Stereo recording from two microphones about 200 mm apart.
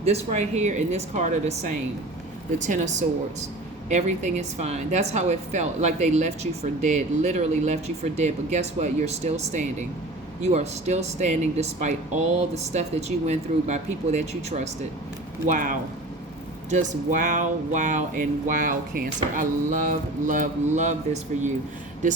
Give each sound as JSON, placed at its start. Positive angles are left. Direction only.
{"t": 0.0, "sound": "speech", "side_deg": -30}